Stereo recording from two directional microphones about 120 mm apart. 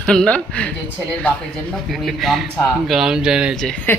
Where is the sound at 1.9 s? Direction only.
Centre (ahead or behind).